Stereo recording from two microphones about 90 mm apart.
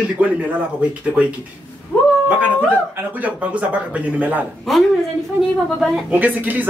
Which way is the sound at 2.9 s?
20° right (ahead or behind).